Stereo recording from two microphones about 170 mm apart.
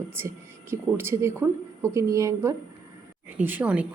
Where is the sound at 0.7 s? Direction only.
15° right (ahead or behind).